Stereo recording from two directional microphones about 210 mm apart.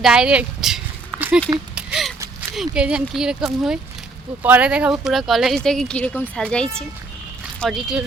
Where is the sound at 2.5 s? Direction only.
Centre (ahead or behind).